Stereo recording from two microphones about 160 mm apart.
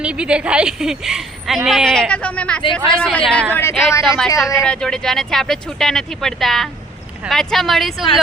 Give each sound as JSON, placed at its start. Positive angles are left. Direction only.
{"t": 0.0, "sound": "a woman's voice", "side_deg": -5}
{"t": 3.5, "sound": "speech", "side_deg": 15}
{"t": 4.5, "sound": "a woman's voice", "side_deg": 5}